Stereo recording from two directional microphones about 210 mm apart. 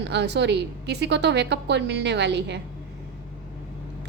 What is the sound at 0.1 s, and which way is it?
A woman's voice, 55° right (ahead or behind).